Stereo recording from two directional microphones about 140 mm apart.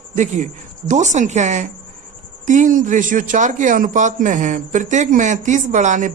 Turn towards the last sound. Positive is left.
turn(degrees=-60)  # may be behind; listen again after turning